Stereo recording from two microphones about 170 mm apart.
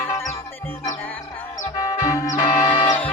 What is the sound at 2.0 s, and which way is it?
Music, 20° left (ahead or behind).